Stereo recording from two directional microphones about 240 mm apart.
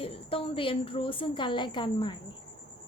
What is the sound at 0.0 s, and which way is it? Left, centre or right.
A woman's voice, left.